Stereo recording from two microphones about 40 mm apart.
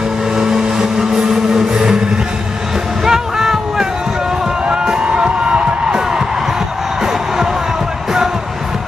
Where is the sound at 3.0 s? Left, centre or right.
Centre.